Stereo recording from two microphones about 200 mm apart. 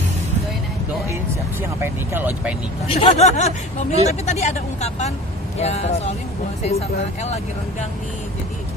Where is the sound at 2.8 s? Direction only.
30° left (ahead or behind).